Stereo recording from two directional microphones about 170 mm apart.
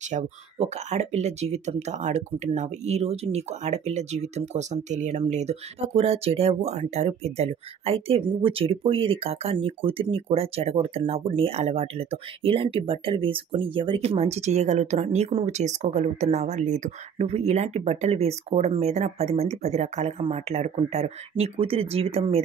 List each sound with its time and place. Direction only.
0.1 s speech: 40° right (ahead or behind)